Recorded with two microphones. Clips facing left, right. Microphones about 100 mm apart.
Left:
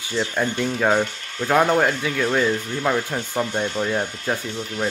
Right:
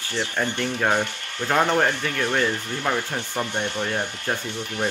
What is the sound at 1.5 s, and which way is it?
Speech, 10° left (ahead or behind).